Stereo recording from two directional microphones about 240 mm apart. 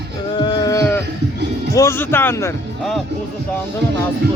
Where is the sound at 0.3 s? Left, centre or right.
Centre.